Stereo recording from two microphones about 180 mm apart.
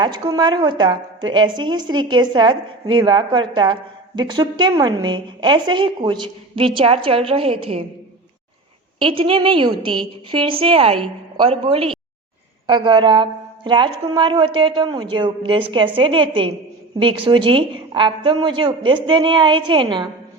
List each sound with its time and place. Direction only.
0.0 s a woman's voice: 25° right (ahead or behind)
9.0 s a woman's voice: 30° right (ahead or behind)